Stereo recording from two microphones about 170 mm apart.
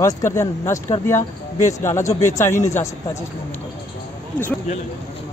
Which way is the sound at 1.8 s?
15° left (ahead or behind).